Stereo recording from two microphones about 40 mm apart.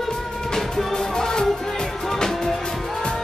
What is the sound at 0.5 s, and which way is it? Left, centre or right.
Music, centre.